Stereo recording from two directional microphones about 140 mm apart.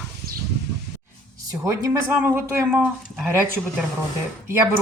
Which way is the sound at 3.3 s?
20° right (ahead or behind).